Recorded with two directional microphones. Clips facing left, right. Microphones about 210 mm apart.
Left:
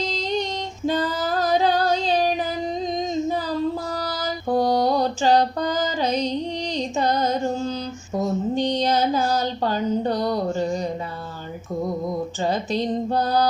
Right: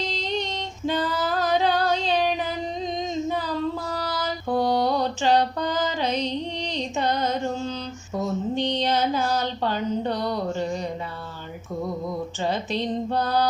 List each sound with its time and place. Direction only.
0.0 s female singing: 40° left (ahead or behind)
3.9 s mantra: 40° left (ahead or behind)
8.1 s speech: 40° left (ahead or behind)
12.4 s music: 40° left (ahead or behind)